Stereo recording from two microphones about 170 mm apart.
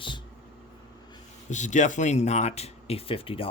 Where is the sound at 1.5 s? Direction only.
45° left (ahead or behind).